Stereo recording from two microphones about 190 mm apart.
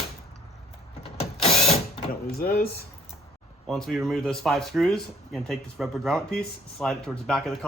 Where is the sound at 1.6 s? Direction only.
35° left (ahead or behind).